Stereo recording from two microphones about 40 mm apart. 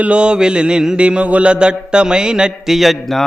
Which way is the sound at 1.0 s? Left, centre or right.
Right.